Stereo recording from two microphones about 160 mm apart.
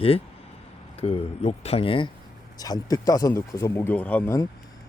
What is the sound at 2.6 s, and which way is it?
Speech, 25° left (ahead or behind).